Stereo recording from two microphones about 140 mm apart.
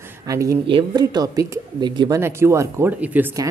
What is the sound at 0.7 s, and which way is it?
Speech, 35° right (ahead or behind).